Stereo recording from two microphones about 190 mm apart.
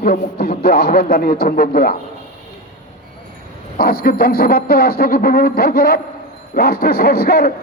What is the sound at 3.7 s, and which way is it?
Speech, 50° left (ahead or behind).